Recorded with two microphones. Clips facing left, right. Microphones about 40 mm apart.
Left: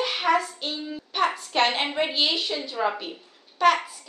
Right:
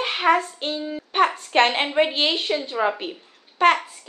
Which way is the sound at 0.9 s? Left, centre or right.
Right.